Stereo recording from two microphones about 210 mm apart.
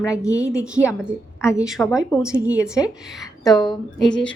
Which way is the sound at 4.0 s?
5° left (ahead or behind).